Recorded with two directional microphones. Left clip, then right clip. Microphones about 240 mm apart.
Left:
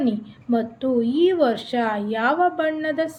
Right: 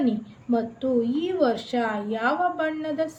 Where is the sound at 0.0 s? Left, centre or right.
Left.